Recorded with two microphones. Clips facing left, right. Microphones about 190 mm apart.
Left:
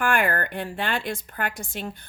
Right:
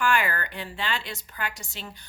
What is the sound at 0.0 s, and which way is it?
A woman's voice, 55° left (ahead or behind).